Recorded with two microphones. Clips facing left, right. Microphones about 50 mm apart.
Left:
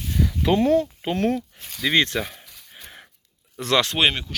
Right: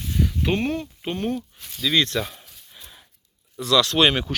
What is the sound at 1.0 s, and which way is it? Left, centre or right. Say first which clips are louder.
Speech: left 4 dB; left.